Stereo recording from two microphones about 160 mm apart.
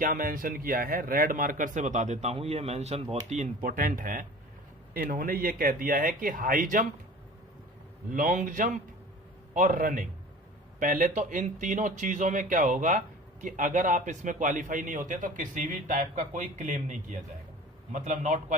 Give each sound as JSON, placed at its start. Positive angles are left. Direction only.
{"t": 0.0, "sound": "speech", "side_deg": -60}
{"t": 8.1, "sound": "a man's voice", "side_deg": -55}